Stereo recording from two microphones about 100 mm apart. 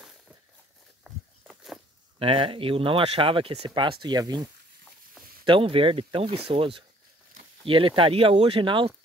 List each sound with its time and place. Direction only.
1.0 s a sound: centre (ahead or behind)
2.1 s speech: 60° right (ahead or behind); by 4.5 s 45° right (ahead or behind)
5.4 s speech: 60° right (ahead or behind)